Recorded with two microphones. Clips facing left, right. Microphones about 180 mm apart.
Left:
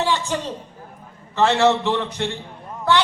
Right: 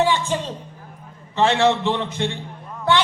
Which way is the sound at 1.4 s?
15° right (ahead or behind).